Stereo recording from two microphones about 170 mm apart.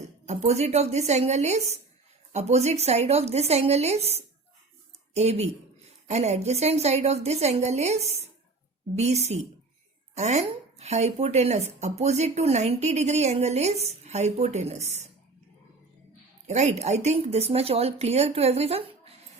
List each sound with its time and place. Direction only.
0.3 s speech: 40° right (ahead or behind)
16.5 s speech: 45° right (ahead or behind)